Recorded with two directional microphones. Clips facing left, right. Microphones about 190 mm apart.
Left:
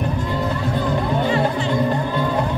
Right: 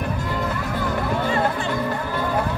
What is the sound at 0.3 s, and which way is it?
Music, 25° left (ahead or behind).